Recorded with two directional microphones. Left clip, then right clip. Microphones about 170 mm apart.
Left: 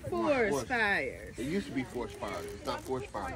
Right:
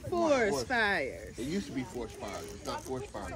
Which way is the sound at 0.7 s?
50° right (ahead or behind).